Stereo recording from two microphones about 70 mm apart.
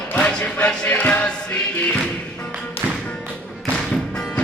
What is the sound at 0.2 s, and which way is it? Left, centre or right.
Music, centre.